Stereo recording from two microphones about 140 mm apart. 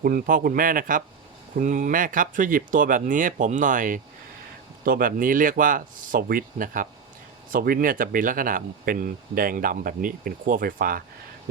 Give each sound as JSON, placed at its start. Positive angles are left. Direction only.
{"t": 0.0, "sound": "a man's voice", "side_deg": -85}
{"t": 4.8, "sound": "speech", "side_deg": -90}